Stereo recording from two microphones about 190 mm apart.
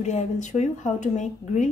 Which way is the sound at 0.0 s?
40° left (ahead or behind).